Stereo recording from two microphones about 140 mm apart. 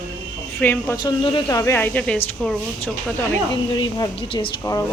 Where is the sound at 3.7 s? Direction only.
35° left (ahead or behind).